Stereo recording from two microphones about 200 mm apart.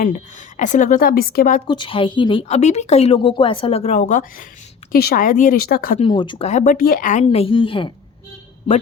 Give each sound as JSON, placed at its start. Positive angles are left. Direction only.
{"t": 0.0, "sound": "a woman's voice", "side_deg": 40}
{"t": 1.6, "sound": "a woman's voice", "side_deg": 25}
{"t": 6.0, "sound": "a woman's voice", "side_deg": 25}
{"t": 6.5, "sound": "speech", "side_deg": 40}
{"t": 7.3, "sound": "a woman's voice", "side_deg": 25}